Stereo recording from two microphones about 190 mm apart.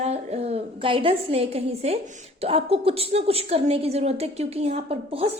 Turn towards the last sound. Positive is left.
turn(degrees=-30)  # may be behind; listen again after turning